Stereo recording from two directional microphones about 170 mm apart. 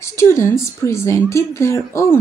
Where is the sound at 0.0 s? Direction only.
15° left (ahead or behind).